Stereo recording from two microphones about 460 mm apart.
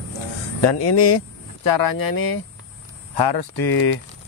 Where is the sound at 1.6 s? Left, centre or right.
Left.